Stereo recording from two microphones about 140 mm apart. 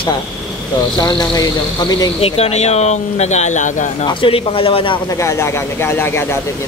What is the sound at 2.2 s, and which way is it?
Speech, 45° left (ahead or behind).